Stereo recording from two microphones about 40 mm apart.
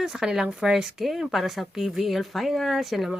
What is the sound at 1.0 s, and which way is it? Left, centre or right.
A woman's voice, centre.